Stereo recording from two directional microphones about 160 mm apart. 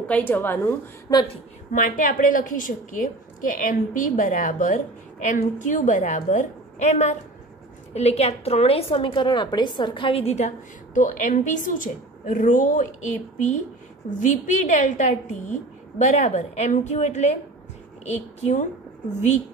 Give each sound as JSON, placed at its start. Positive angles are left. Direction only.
{"t": 0.0, "sound": "a woman's voice", "side_deg": 10}
{"t": 1.7, "sound": "a woman's voice", "side_deg": 55}
{"t": 11.0, "sound": "a woman's voice", "side_deg": 50}